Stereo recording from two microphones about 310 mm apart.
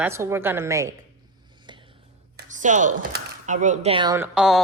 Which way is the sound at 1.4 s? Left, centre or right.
Centre.